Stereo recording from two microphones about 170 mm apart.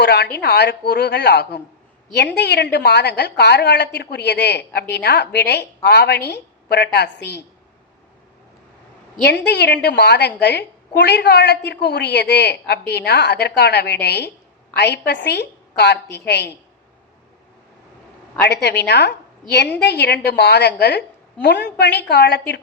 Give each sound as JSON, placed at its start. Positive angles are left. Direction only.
{"t": 0.0, "sound": "a woman's voice", "side_deg": 80}
{"t": 9.2, "sound": "a woman's voice", "side_deg": 75}
{"t": 18.4, "sound": "a woman's voice", "side_deg": 75}